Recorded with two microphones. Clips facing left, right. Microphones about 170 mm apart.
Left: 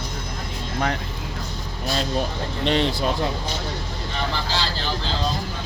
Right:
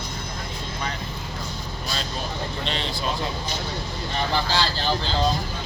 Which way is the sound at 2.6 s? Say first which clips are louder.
Left 12 dB; 55° left (ahead or behind).